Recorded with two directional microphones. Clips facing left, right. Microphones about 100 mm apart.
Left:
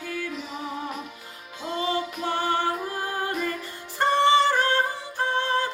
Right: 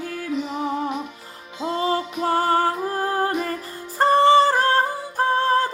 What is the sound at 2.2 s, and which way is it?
Music, 40° right (ahead or behind).